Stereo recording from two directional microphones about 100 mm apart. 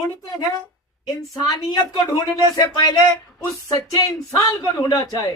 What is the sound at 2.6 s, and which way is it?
Speech, 40° left (ahead or behind).